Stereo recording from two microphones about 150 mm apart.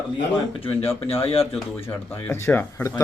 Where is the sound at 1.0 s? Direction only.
40° left (ahead or behind).